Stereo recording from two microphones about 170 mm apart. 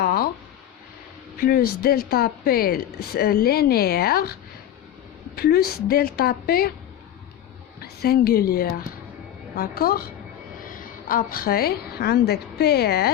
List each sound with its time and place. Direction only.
0.0 s a sound: 65° left (ahead or behind)
1.4 s speech: 60° left (ahead or behind)
5.4 s speech: 65° left (ahead or behind)
8.0 s a woman's voice: 65° left (ahead or behind)